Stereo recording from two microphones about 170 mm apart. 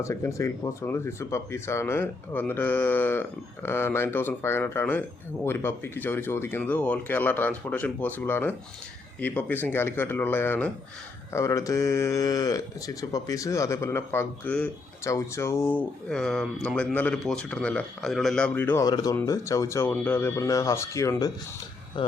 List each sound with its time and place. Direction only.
0.0 s speech: 15° left (ahead or behind)